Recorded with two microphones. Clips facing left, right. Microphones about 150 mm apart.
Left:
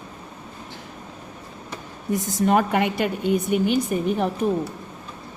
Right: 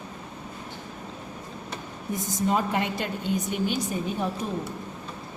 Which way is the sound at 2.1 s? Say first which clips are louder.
Left 6 dB; 75° left (ahead or behind).